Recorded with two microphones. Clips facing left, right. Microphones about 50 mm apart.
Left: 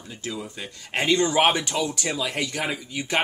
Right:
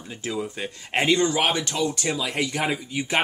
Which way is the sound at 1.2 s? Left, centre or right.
Centre.